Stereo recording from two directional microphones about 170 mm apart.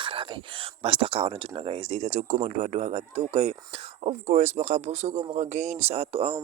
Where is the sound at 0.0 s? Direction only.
30° right (ahead or behind).